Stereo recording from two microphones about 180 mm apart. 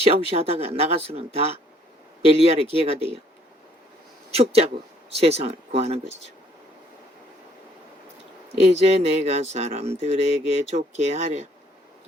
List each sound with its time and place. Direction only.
0.0 s speech: 35° right (ahead or behind)
4.4 s speech: 35° right (ahead or behind)
8.6 s speech: 35° right (ahead or behind)